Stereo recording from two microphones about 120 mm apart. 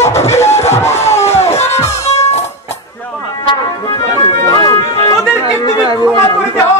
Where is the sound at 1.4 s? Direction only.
65° left (ahead or behind).